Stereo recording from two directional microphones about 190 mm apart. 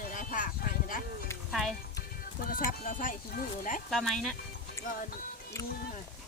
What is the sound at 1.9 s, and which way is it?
Music, 50° left (ahead or behind).